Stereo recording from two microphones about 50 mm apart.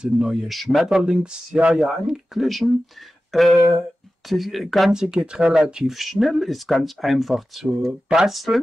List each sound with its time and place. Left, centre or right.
0.0 s speech: centre
0.4 s speech: centre
0.8 s speech: centre
2.4 s speech: centre
3.3 s a sound: centre
4.3 s speech: centre
4.9 s speech: centre
5.9 s speech: centre
7.8 s speech: centre